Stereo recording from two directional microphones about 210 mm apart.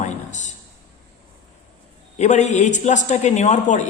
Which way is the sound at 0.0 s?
35° left (ahead or behind).